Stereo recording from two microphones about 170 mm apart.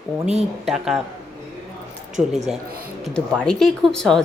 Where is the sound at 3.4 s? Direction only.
5° left (ahead or behind).